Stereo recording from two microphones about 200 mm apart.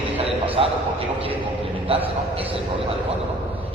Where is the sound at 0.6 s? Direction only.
25° right (ahead or behind).